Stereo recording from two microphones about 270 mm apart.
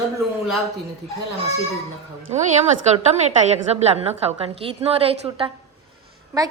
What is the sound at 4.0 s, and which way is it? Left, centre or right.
A woman's voice, right.